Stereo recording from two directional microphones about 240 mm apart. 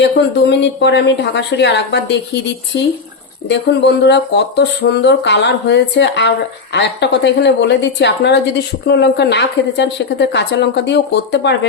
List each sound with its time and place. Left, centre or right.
0.6 s a woman's voice: left
3.5 s a woman's voice: left